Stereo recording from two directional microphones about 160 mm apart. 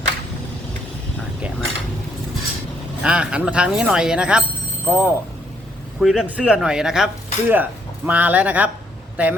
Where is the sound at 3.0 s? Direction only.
5° right (ahead or behind).